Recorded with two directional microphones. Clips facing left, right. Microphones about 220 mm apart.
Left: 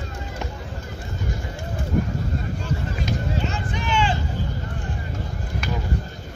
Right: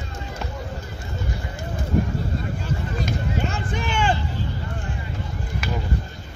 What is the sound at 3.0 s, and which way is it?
Run, 50° right (ahead or behind).